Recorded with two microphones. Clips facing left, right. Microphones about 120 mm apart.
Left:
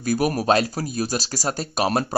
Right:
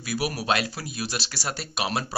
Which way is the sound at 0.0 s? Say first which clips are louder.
Left 7 dB; 45° left (ahead or behind).